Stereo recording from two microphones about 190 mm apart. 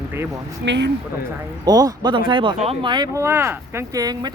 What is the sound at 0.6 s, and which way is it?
Speech, 65° right (ahead or behind).